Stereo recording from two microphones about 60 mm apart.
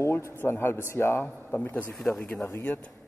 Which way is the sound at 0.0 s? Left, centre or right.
Left.